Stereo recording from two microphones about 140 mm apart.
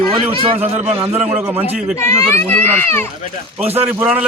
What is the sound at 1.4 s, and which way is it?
Speech, 15° right (ahead or behind).